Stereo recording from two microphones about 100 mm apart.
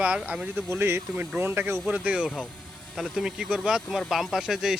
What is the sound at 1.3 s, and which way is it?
Speech, 20° right (ahead or behind).